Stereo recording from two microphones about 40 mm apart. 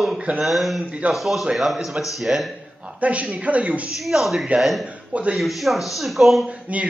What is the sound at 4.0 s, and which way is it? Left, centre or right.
Speech, centre.